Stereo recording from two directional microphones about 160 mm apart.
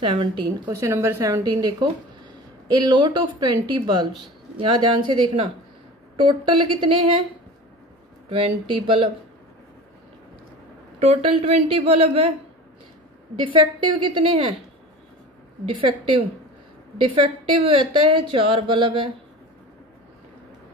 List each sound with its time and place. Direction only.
0.0 s a woman's voice: 30° right (ahead or behind)
0.7 s a woman's voice: 20° right (ahead or behind)
8.3 s a woman's voice: 35° right (ahead or behind)
11.0 s a woman's voice: 40° right (ahead or behind)
13.4 s a woman's voice: 30° right (ahead or behind)
15.8 s a woman's voice: 35° right (ahead or behind)